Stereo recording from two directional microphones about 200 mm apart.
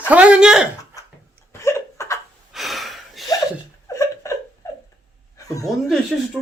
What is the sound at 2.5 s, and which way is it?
Gasp, centre (ahead or behind).